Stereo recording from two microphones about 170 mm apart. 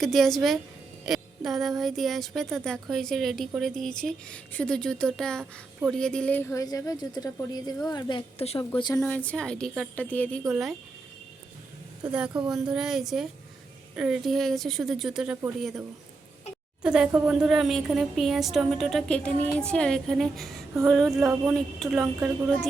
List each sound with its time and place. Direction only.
0.0 s a woman's voice: centre (ahead or behind); by 9.0 s 30° left (ahead or behind)
9.0 s speech: 10° left (ahead or behind)
12.1 s speech: 5° right (ahead or behind)
16.8 s speech: 5° right (ahead or behind)